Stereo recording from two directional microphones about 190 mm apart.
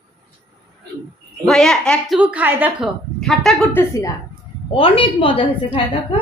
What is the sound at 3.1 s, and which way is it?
Speech, centre (ahead or behind).